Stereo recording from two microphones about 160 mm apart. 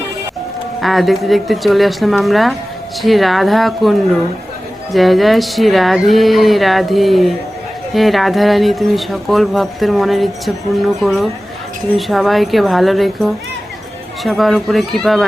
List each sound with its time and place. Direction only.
0.8 s speech: centre (ahead or behind)